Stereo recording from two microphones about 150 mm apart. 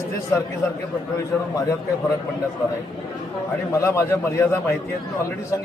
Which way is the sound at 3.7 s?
20° left (ahead or behind).